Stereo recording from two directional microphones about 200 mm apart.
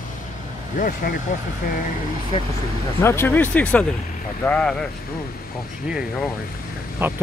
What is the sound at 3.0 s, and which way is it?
Speech, 10° left (ahead or behind).